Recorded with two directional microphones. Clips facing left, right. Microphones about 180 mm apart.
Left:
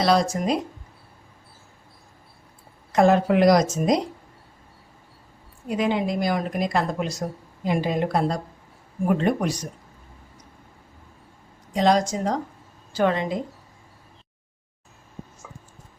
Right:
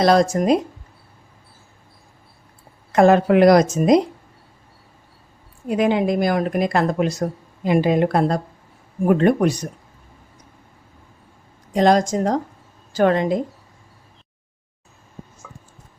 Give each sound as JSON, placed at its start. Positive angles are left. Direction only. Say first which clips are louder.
{"t": 0.0, "sound": "speech", "louder": "right 5 dB", "side_deg": -50}
{"t": 2.9, "sound": "speech", "louder": "right 4 dB", "side_deg": -60}
{"t": 5.6, "sound": "speech", "louder": "right 5 dB", "side_deg": -50}
{"t": 11.7, "sound": "a woman's voice", "louder": "right 4 dB", "side_deg": -50}